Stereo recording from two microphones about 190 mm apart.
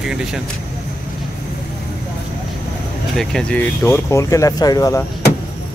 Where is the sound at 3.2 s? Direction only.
5° left (ahead or behind); by 5.0 s 20° left (ahead or behind).